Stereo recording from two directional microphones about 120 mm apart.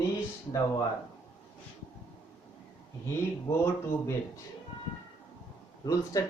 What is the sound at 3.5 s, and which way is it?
Speech, 25° left (ahead or behind).